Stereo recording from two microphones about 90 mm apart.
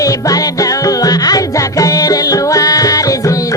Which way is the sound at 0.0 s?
40° left (ahead or behind).